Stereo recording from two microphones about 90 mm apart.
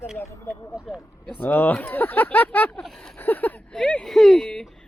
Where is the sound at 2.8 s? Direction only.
5° left (ahead or behind).